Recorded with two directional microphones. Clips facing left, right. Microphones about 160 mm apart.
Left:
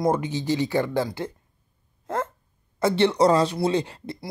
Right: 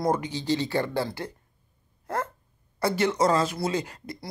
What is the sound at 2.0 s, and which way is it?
Dog, 20° left (ahead or behind).